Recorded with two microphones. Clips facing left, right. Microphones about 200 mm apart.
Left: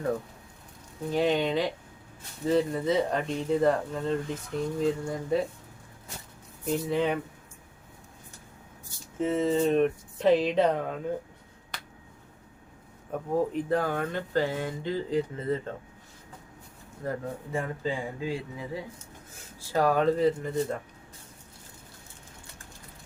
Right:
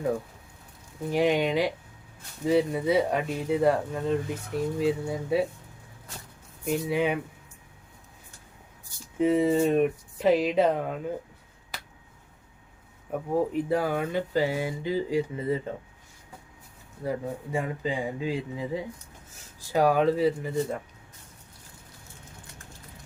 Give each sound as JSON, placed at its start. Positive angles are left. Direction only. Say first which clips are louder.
{"t": 1.1, "sound": "speech", "louder": "right 2 dB", "side_deg": -15}
{"t": 6.7, "sound": "speech", "louder": "right 1 dB", "side_deg": -10}
{"t": 9.1, "sound": "speech", "louder": "right 3 dB", "side_deg": -15}
{"t": 11.7, "sound": "finger snapping", "louder": "right 1 dB", "side_deg": -5}
{"t": 13.7, "sound": "speech", "louder": "right 1 dB", "side_deg": -10}
{"t": 17.0, "sound": "speech", "louder": "right 2 dB", "side_deg": -10}